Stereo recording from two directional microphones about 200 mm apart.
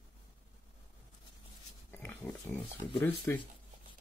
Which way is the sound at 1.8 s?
10° left (ahead or behind).